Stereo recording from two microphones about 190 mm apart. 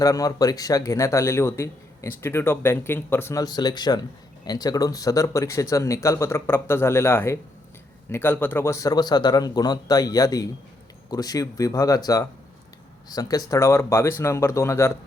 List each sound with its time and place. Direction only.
0.0 s a man's voice: 20° left (ahead or behind)